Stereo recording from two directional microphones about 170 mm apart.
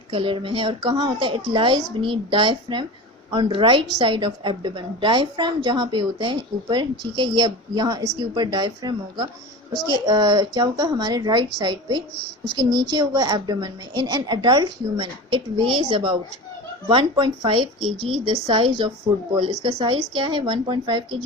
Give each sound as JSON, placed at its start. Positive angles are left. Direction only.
{"t": 0.1, "sound": "a woman's voice", "side_deg": -30}